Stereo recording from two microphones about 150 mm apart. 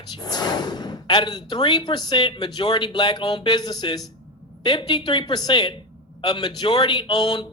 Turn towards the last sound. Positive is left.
turn(degrees=30)  # may be behind; listen again after turning